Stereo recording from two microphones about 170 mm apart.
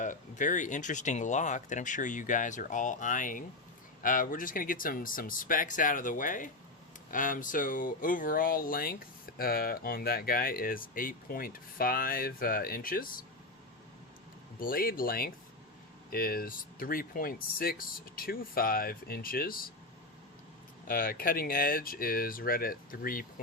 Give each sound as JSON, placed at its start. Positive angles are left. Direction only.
{"t": 0.0, "sound": "speech", "side_deg": 50}
{"t": 14.6, "sound": "speech", "side_deg": 55}
{"t": 20.8, "sound": "speech", "side_deg": 60}